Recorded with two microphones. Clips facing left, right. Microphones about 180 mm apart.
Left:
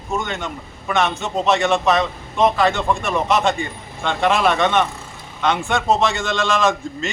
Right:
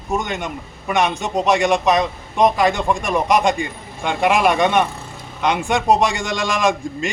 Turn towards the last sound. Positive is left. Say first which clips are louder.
# right 1 dB
turn(degrees=-15)  # may be behind; listen again after turning